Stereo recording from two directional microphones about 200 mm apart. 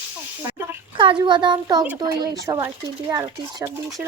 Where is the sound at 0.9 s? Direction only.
25° right (ahead or behind).